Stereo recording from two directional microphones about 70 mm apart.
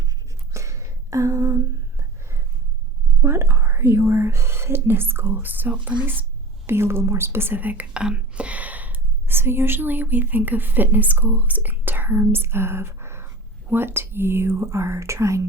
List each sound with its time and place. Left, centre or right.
0.5 s a sound: right
3.2 s speech: right
6.7 s speech: right